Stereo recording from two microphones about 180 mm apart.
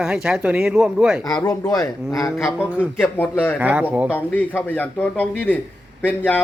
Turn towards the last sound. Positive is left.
turn(degrees=10)  # may be behind; listen again after turning